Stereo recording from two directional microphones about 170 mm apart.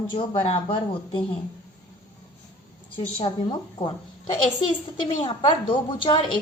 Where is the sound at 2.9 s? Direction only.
35° left (ahead or behind).